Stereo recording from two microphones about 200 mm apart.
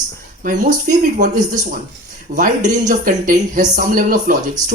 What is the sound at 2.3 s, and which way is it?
Speech, 40° right (ahead or behind).